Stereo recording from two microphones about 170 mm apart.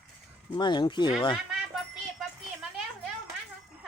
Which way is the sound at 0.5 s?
25° left (ahead or behind).